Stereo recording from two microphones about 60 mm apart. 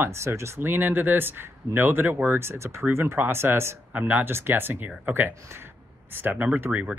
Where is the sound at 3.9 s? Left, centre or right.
Right.